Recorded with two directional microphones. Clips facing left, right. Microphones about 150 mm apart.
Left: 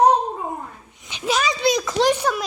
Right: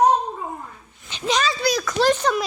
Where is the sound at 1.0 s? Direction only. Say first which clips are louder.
Even; 10° left (ahead or behind).